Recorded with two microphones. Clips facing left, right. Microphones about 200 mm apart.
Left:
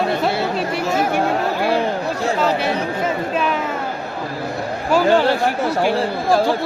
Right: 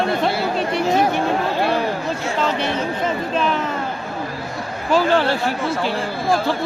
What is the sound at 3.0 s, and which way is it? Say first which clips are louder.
Speech: even; 10° left (ahead or behind).